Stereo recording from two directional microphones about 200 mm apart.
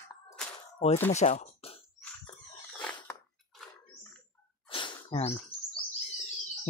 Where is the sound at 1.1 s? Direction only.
35° left (ahead or behind).